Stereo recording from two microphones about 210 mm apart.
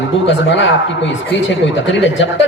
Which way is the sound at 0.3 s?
60° left (ahead or behind).